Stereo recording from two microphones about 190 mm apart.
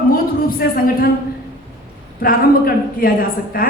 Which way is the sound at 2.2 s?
50° left (ahead or behind).